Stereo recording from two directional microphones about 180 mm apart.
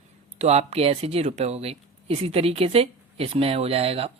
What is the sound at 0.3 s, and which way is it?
Speech, 35° right (ahead or behind).